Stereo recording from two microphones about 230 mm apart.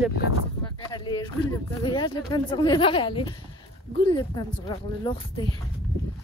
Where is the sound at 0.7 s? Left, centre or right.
Centre.